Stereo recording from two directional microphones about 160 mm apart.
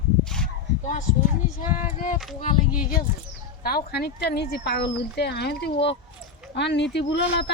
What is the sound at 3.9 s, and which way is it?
Speech, 80° left.